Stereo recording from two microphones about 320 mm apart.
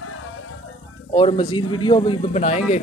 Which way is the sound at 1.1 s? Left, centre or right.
Centre.